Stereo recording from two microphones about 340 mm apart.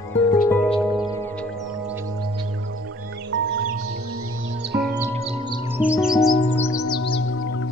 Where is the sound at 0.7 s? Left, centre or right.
Centre.